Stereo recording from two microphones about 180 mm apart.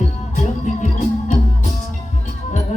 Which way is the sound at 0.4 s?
45° left (ahead or behind).